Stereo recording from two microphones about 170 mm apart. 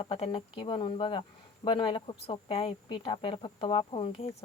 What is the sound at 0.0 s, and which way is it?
Speech, 30° left (ahead or behind).